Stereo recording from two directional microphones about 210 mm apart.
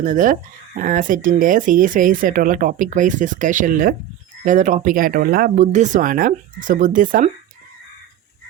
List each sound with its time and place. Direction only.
0.0 s speech: 40° right (ahead or behind)